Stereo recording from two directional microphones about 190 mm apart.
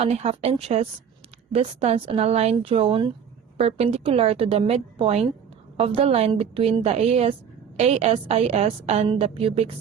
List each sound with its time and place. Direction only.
0.0 s a woman's voice: 35° right (ahead or behind)